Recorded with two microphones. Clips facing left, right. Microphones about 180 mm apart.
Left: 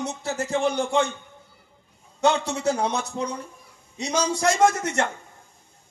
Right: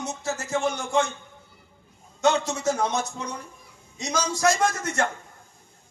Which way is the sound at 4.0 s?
30° left (ahead or behind).